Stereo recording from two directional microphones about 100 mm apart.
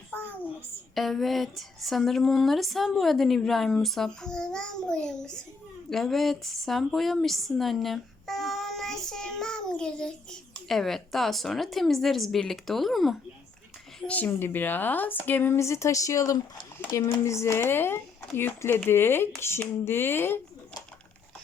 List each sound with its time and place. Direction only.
0.9 s a woman's voice: centre (ahead or behind)
14.1 s speech: 20° left (ahead or behind)